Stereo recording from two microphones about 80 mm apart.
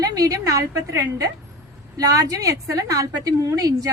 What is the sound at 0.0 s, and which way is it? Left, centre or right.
A woman's voice, right.